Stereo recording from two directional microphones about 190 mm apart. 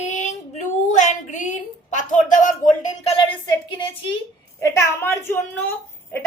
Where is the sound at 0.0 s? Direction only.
40° left (ahead or behind).